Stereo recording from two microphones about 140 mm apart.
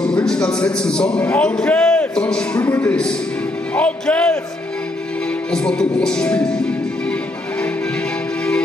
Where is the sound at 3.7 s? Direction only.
10° left (ahead or behind).